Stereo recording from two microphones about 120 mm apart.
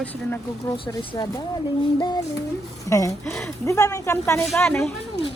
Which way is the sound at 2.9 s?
25° left (ahead or behind).